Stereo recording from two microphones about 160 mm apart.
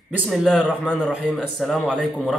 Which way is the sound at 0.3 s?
Centre (ahead or behind).